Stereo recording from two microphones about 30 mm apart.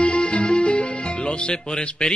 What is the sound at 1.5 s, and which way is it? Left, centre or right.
Speech, left.